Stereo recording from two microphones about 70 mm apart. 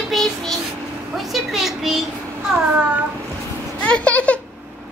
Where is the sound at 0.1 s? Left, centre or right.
Centre.